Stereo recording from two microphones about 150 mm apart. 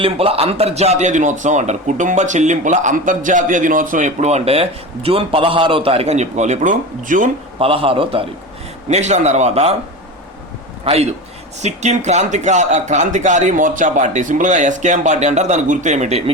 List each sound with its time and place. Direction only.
0.0 s a man's voice: 40° right (ahead or behind); by 7.3 s 60° right (ahead or behind)
7.6 s a man's voice: 40° right (ahead or behind)
8.9 s a man's voice: 50° right (ahead or behind)
10.8 s a man's voice: 45° right (ahead or behind)